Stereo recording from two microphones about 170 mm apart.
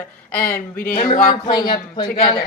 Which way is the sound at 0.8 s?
60° left (ahead or behind).